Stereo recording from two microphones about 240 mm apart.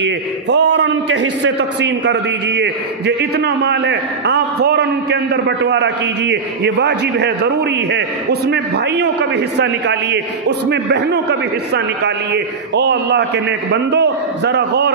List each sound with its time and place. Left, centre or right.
0.0 s a man's voice: right